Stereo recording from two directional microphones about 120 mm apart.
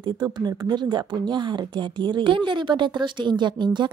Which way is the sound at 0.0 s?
35° right (ahead or behind).